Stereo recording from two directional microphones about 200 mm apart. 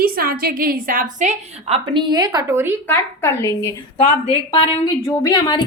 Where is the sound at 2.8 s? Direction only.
10° left (ahead or behind).